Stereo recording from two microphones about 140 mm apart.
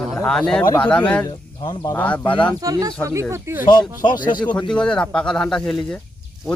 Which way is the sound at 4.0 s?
30° left (ahead or behind).